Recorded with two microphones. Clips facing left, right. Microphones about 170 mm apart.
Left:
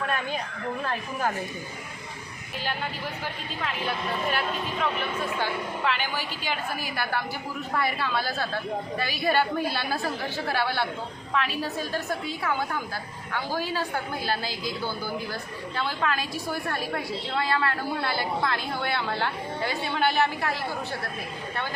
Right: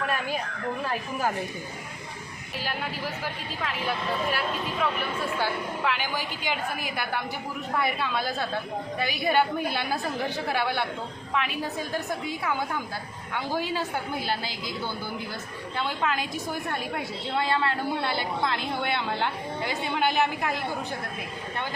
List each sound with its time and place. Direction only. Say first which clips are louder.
4.3 s a woman's voice: even; 5° right (ahead or behind); by 14.7 s 20° right (ahead or behind)
15.7 s a woman's voice: even; 20° right (ahead or behind)